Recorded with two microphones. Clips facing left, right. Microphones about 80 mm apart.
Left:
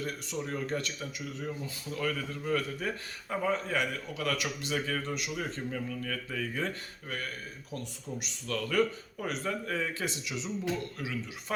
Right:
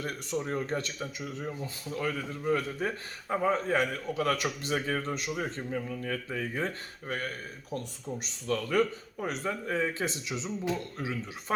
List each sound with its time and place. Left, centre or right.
0.0 s speech: right
0.3 s speech: right
5.4 s speech: centre
8.2 s speech: right